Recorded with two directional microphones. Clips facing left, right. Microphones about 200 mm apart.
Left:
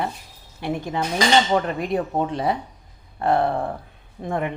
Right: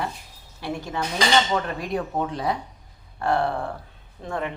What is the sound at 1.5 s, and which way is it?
Dishes, 25° left (ahead or behind).